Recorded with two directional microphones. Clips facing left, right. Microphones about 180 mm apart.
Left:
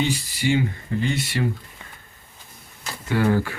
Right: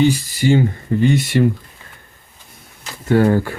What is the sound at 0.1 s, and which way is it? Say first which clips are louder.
Speech: right 6 dB; 45° right (ahead or behind).